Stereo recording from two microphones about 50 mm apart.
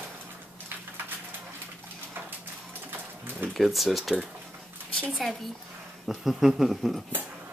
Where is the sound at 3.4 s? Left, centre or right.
Centre.